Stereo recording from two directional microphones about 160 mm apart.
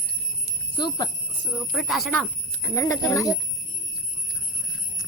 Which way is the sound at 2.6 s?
15° left (ahead or behind).